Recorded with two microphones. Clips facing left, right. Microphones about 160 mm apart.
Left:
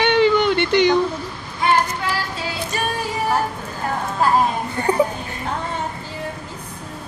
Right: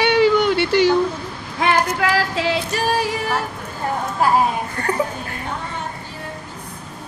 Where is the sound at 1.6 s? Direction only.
90° right.